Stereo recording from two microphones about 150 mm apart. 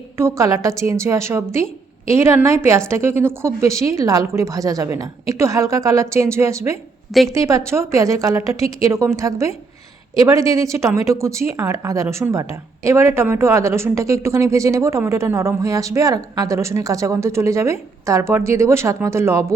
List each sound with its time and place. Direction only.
0.2 s a woman's voice: 20° right (ahead or behind)